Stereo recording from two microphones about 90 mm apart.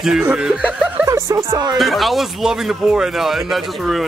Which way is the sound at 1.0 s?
30° right (ahead or behind).